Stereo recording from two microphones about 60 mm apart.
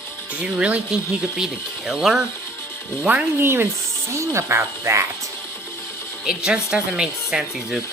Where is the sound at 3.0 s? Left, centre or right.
Right.